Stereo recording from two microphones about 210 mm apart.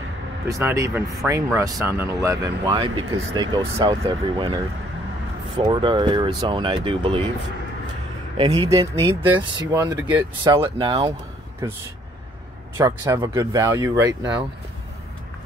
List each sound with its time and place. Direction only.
0.5 s speech: 15° right (ahead or behind)
5.6 s speech: 20° right (ahead or behind)
8.4 s speech: 25° right (ahead or behind)